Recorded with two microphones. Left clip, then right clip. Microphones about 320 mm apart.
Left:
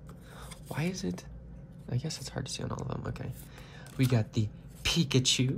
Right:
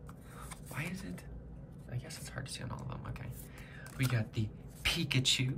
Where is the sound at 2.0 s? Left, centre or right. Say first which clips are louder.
Left 6 dB; centre.